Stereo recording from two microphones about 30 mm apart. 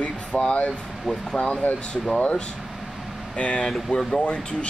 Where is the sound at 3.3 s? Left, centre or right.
Left.